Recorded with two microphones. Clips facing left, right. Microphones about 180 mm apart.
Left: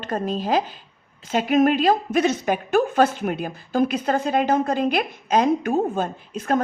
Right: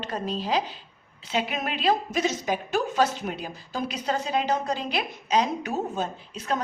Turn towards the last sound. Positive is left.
turn(degrees=50)  # may be behind; listen again after turning